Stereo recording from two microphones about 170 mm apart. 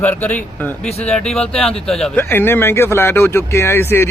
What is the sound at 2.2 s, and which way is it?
Speech, 15° left (ahead or behind).